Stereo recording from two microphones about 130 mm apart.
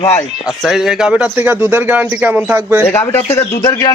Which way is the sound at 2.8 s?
20° left (ahead or behind).